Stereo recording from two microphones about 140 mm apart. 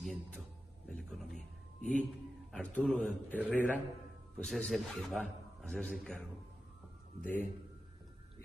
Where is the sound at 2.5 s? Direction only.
5° left (ahead or behind).